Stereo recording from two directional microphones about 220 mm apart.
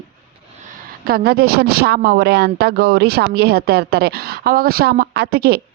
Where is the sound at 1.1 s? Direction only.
45° right (ahead or behind).